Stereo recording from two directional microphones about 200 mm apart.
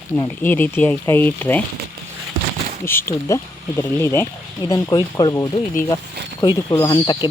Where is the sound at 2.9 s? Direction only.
10° left (ahead or behind).